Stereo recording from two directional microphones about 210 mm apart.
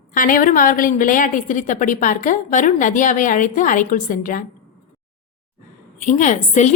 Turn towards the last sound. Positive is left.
turn(degrees=35)  # may be behind; listen again after turning